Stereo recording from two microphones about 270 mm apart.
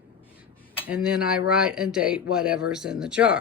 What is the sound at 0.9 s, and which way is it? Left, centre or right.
Speech, centre.